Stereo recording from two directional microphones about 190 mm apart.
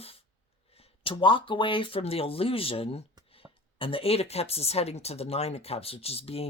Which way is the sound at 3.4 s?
10° right (ahead or behind).